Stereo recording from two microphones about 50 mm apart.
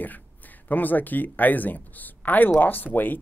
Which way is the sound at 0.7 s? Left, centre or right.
Left.